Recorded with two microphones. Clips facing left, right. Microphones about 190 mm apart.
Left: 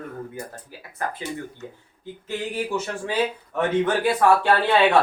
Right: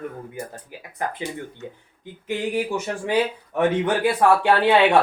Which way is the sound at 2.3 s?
15° right (ahead or behind).